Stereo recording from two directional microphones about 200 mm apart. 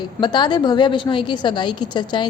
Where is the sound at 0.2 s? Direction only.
20° left (ahead or behind).